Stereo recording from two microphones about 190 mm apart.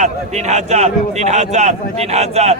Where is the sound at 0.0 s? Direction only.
35° right (ahead or behind).